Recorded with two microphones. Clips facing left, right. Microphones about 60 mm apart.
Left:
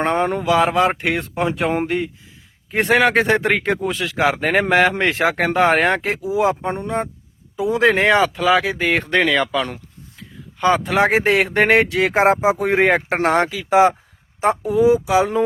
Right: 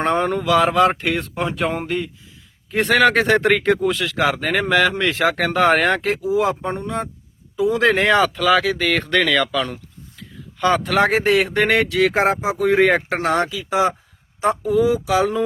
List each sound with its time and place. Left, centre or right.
0.0 s speech: centre
1.7 s speech: left
3.0 s speech: centre
4.2 s speech: left
5.3 s speech: left